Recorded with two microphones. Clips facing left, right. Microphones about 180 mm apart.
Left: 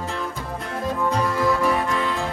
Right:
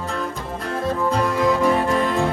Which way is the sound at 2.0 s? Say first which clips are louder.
Right 5 dB; 50° right (ahead or behind).